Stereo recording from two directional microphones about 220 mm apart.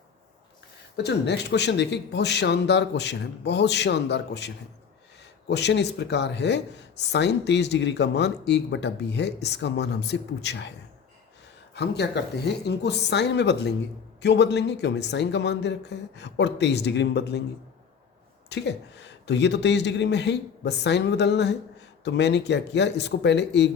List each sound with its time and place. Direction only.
0.9 s speech: 50° left (ahead or behind)
11.7 s speech: 50° left (ahead or behind)
18.4 s speech: 50° left (ahead or behind)